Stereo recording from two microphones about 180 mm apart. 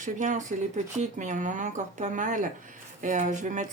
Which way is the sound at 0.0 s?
45° right (ahead or behind).